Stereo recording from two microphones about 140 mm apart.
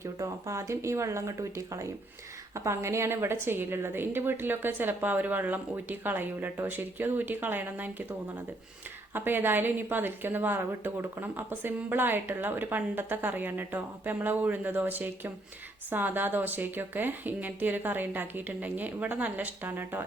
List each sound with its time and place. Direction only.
0.0 s a woman's voice: 20° right (ahead or behind)
9.1 s a woman's voice: 15° right (ahead or behind)